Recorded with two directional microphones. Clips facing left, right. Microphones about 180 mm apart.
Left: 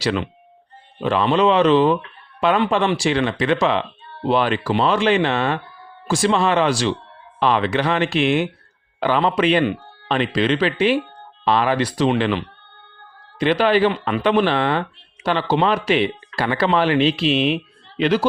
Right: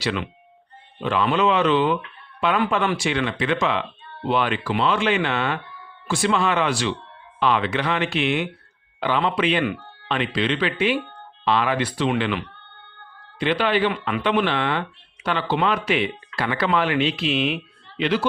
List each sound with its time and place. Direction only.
0.0 s a man's voice: 40° left (ahead or behind)